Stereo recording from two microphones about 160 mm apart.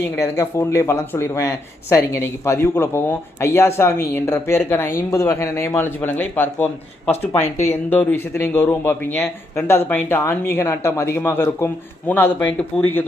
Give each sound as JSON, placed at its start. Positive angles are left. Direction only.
{"t": 0.2, "sound": "speech", "side_deg": 15}